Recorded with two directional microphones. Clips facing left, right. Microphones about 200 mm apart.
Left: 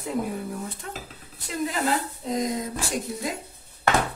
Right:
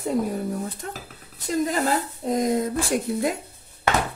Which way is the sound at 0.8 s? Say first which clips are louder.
Right 3 dB; 40° right (ahead or behind).